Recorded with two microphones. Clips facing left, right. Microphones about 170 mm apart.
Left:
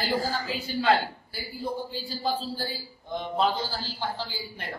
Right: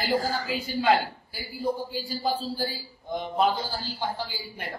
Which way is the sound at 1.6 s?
10° right (ahead or behind).